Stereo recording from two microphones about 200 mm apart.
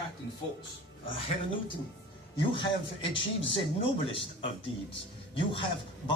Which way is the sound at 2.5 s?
25° left (ahead or behind).